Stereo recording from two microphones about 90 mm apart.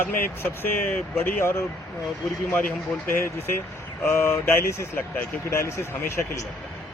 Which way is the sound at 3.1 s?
25° left (ahead or behind).